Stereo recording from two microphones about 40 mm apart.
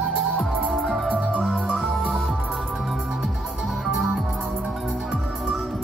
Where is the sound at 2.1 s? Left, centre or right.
Centre.